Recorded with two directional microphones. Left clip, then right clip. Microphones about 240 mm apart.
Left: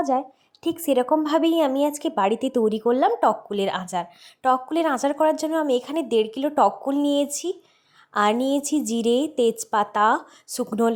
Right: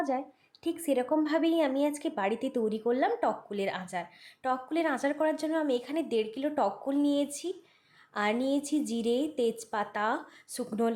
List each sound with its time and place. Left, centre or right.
0.0 s a woman's voice: left